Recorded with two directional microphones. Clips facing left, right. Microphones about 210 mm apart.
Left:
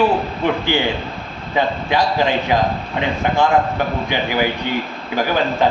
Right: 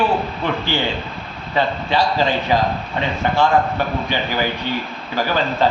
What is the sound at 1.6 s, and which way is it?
A man's voice, 15° left (ahead or behind).